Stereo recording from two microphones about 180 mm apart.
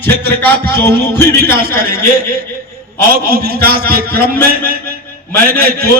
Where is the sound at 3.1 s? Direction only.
55° right (ahead or behind).